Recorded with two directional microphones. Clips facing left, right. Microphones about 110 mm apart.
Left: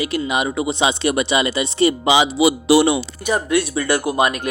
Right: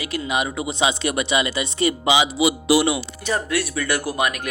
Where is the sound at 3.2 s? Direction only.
20° left (ahead or behind).